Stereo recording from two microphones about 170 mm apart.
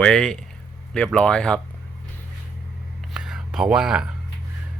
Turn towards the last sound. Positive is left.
turn(degrees=-5)  # may be behind; listen again after turning